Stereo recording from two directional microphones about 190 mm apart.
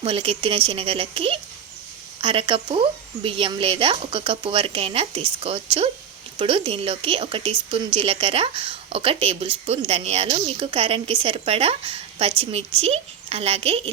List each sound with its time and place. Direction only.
0.0 s a woman's voice: 30° right (ahead or behind)